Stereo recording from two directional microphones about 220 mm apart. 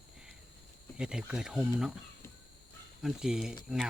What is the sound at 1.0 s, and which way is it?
Speech, 5° right (ahead or behind).